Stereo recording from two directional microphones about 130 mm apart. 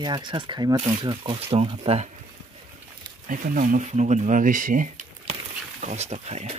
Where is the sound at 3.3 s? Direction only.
90° right.